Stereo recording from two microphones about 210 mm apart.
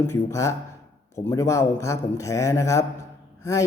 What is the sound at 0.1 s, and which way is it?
Speech, 15° left (ahead or behind).